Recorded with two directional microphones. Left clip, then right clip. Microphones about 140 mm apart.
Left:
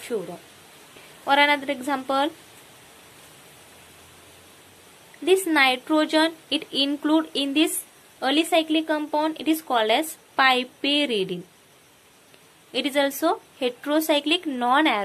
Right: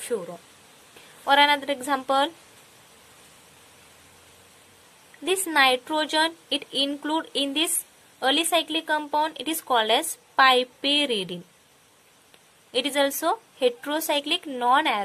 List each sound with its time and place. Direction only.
0.1 s a woman's voice: 45° right (ahead or behind)
5.2 s speech: 40° right (ahead or behind)
12.7 s speech: 40° right (ahead or behind)